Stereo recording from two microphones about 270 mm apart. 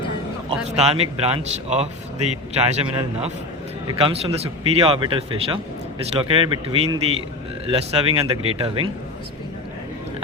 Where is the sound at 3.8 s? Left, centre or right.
Right.